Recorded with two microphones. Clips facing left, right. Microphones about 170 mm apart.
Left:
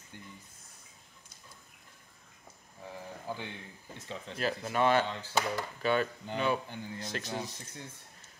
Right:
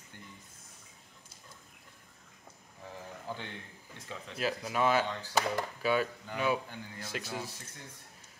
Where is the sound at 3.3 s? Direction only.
10° left (ahead or behind).